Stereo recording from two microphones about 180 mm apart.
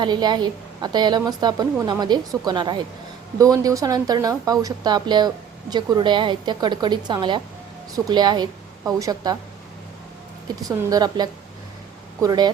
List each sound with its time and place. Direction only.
0.0 s a woman's voice: 25° right (ahead or behind)
10.5 s a woman's voice: 20° right (ahead or behind)